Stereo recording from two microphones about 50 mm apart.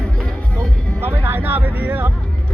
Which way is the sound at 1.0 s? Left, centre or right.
Right.